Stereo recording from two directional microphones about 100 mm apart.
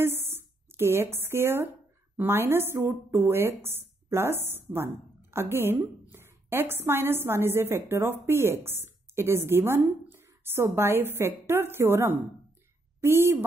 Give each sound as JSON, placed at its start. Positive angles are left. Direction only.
{"t": 0.0, "sound": "a woman's voice", "side_deg": -25}